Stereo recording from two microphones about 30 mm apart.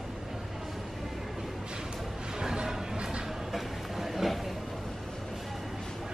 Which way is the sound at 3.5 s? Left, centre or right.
Centre.